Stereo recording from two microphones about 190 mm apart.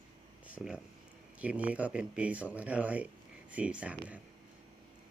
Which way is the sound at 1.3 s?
5° right (ahead or behind).